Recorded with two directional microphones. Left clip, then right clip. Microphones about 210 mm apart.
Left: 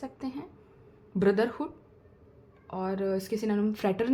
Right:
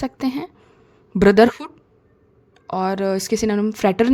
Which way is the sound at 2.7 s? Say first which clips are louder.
Right 10 dB; 40° right (ahead or behind).